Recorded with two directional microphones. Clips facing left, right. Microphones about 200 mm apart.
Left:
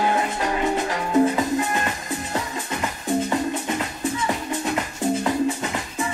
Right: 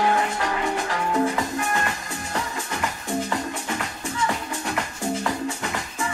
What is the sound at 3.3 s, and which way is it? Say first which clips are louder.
Music: left 4 dB; 20° left (ahead or behind).